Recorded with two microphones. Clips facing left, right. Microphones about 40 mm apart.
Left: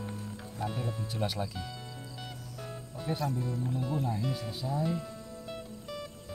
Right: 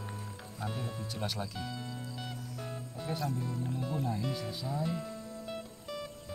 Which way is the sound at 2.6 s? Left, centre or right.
Centre.